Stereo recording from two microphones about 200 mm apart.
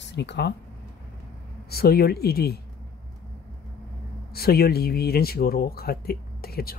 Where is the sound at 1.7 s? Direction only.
50° left (ahead or behind).